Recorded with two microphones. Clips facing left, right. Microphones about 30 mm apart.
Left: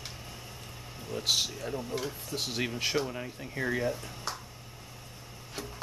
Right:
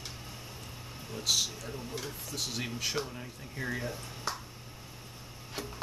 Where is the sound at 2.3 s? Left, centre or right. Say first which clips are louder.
Left 3 dB; left.